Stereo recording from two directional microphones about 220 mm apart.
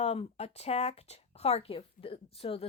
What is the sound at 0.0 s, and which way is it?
A woman's voice, 30° left (ahead or behind).